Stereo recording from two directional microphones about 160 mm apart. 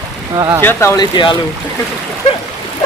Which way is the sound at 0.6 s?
15° left (ahead or behind).